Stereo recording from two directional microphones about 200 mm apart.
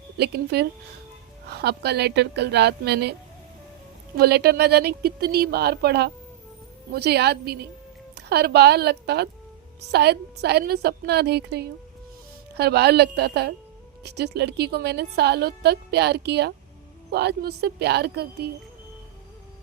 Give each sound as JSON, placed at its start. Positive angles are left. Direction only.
{"t": 0.2, "sound": "a woman's voice", "side_deg": -55}
{"t": 4.2, "sound": "a woman's voice", "side_deg": -55}